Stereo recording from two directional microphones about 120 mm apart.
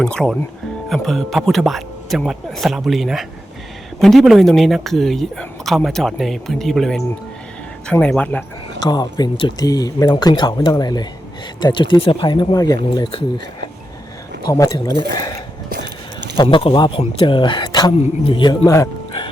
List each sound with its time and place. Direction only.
0.0 s speech: 5° left (ahead or behind)
8.8 s speech: 35° left (ahead or behind)
14.5 s speech: 30° left (ahead or behind)
16.4 s a man's voice: 45° left (ahead or behind)
18.6 s speech: 25° left (ahead or behind)